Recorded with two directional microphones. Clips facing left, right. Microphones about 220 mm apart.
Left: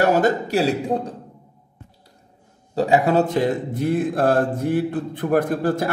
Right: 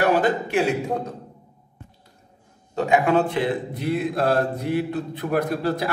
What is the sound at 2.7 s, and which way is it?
Speech, 35° left (ahead or behind).